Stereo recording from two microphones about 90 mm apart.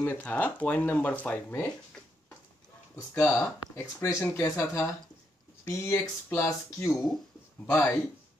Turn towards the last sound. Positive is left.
turn(degrees=30)  # may be behind; listen again after turning